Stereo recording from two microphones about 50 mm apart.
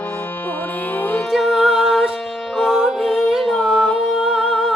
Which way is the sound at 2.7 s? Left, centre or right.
Centre.